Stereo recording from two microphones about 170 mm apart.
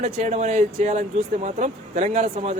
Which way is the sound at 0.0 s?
45° right (ahead or behind).